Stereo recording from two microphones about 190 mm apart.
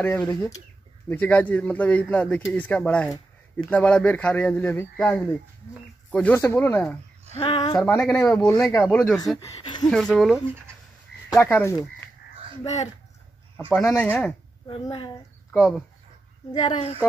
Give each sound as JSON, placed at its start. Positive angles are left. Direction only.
{"t": 0.0, "sound": "a man's voice", "side_deg": 10}
{"t": 7.3, "sound": "a woman's voice", "side_deg": 30}
{"t": 7.8, "sound": "a man's voice", "side_deg": 10}
{"t": 9.5, "sound": "a woman's voice", "side_deg": 25}
{"t": 9.8, "sound": "speech", "side_deg": 0}
{"t": 11.4, "sound": "a man's voice", "side_deg": 10}
{"t": 13.8, "sound": "a man's voice", "side_deg": 10}
{"t": 14.7, "sound": "a woman's voice", "side_deg": 25}
{"t": 15.5, "sound": "speech", "side_deg": 0}
{"t": 16.5, "sound": "a woman's voice", "side_deg": 25}